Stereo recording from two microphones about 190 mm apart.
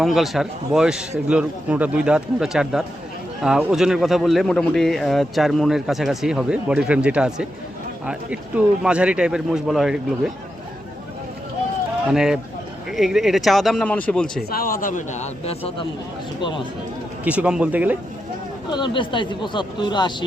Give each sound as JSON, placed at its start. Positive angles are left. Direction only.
{"t": 0.0, "sound": "speech", "side_deg": 0}
{"t": 12.0, "sound": "speech", "side_deg": -5}
{"t": 14.5, "sound": "speech", "side_deg": 50}
{"t": 17.2, "sound": "a man's voice", "side_deg": -5}
{"t": 18.7, "sound": "speech", "side_deg": 25}